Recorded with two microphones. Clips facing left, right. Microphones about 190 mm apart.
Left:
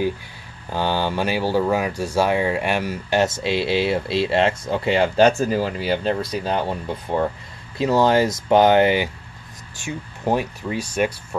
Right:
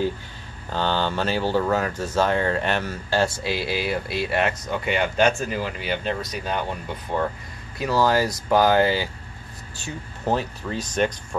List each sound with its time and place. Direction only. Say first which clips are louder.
0.7 s speech: left 2 dB; 10° left (ahead or behind)